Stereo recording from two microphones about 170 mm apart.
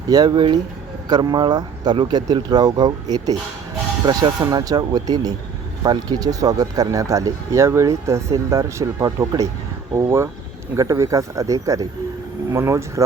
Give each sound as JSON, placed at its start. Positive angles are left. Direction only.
{"t": 0.1, "sound": "speech", "side_deg": -25}